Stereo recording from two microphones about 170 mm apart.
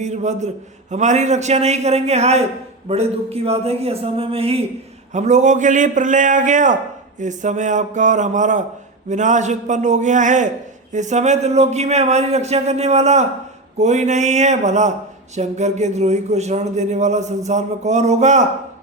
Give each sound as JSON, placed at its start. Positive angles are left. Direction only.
{"t": 0.0, "sound": "a man's voice", "side_deg": -45}